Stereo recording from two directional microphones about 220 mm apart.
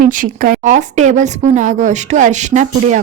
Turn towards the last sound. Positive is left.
turn(degrees=-35)  # may be behind; listen again after turning